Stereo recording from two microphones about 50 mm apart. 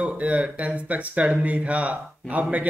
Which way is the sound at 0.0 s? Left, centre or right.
Right.